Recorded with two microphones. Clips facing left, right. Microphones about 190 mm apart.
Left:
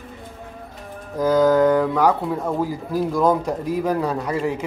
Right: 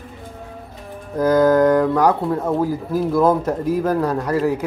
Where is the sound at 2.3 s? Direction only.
5° right (ahead or behind).